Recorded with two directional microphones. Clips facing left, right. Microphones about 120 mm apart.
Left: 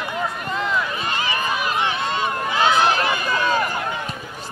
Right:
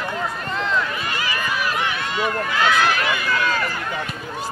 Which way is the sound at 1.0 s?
25° left (ahead or behind).